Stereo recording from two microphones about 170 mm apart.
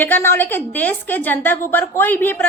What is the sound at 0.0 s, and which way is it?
A woman's voice, 10° left (ahead or behind).